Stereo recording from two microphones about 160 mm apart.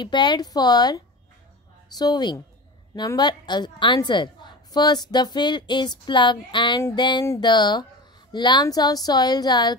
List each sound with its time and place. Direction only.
0.0 s a woman's voice: 30° left (ahead or behind)